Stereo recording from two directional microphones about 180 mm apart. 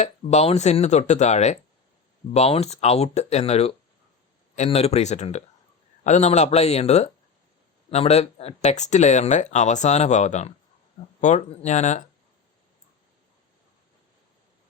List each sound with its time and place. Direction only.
0.0 s speech: 40° left (ahead or behind)